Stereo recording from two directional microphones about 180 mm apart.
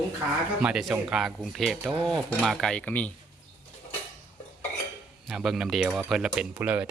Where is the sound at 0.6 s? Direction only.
Centre (ahead or behind).